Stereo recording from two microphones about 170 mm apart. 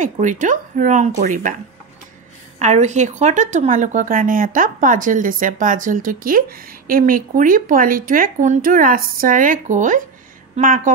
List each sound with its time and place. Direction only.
0.0 s speech: 45° right (ahead or behind)
2.6 s speech: 45° right (ahead or behind)